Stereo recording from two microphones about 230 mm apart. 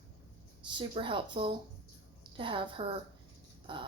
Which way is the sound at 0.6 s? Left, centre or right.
Right.